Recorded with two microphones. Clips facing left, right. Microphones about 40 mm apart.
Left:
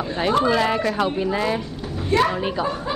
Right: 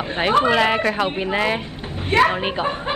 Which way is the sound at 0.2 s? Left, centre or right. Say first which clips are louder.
Right 3 dB; right.